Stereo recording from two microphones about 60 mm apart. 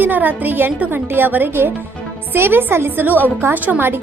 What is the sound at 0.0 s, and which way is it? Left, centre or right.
A woman's voice, right.